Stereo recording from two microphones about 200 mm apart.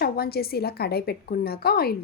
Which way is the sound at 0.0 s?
50° left (ahead or behind).